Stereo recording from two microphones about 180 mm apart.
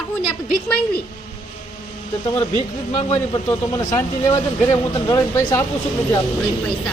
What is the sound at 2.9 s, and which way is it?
Speech, 35° left (ahead or behind).